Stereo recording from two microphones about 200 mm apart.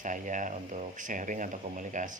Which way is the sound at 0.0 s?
40° right (ahead or behind).